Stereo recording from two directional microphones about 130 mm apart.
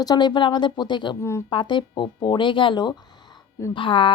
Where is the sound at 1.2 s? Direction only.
20° left (ahead or behind).